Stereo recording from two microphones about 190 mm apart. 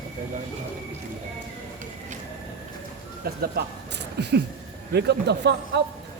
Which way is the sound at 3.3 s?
50° right (ahead or behind).